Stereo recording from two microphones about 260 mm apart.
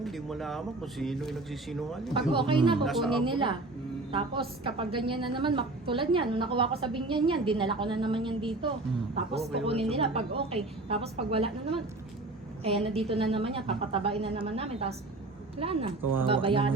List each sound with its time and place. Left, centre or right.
0.0 s speech: centre
2.3 s a woman's voice: centre
2.8 s speech: centre
3.2 s a woman's voice: centre
9.9 s a woman's voice: right